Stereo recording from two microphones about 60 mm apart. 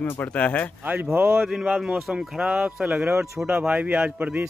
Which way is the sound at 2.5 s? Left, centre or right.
Right.